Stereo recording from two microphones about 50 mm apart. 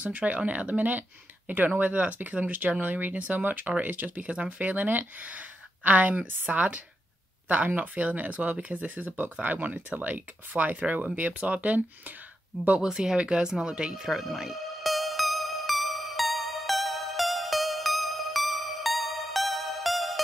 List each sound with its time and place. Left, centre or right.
0.0 s speech: right
12.8 s music: centre